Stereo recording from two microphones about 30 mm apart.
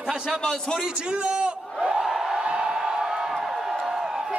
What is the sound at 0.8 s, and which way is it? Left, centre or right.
Speech, right.